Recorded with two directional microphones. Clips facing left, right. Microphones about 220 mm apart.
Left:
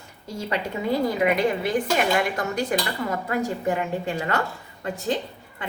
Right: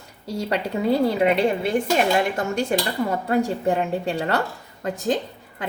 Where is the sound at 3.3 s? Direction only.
30° right (ahead or behind).